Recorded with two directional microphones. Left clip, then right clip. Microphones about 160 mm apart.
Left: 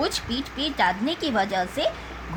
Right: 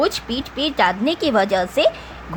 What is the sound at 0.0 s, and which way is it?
A woman's voice, 55° right (ahead or behind).